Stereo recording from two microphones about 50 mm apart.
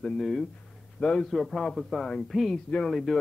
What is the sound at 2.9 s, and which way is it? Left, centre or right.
Speech, centre.